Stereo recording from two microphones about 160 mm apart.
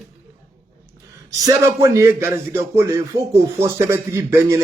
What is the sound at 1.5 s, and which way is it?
Speech, 20° right (ahead or behind).